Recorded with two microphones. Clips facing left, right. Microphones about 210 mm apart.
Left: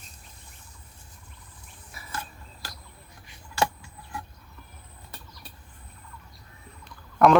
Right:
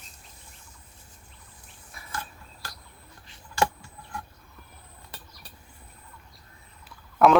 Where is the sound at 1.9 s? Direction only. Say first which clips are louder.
Left 1 dB; centre (ahead or behind).